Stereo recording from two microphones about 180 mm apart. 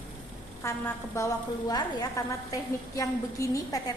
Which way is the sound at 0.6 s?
15° left (ahead or behind).